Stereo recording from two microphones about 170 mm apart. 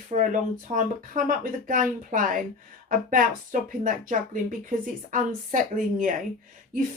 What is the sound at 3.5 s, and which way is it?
Speech, 50° right (ahead or behind).